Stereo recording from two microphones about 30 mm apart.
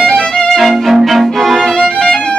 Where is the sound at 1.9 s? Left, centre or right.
Left.